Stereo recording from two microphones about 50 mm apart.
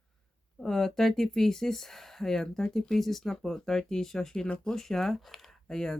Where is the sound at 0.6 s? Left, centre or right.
Centre.